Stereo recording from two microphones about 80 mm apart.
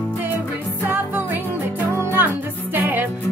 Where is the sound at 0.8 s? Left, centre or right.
Right.